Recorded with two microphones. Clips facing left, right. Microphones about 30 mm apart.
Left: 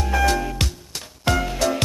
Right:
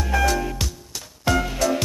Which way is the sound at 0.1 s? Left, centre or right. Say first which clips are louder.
Even; centre.